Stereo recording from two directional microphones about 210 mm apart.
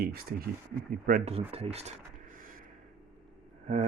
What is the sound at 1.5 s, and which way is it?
Speech, 30° right (ahead or behind).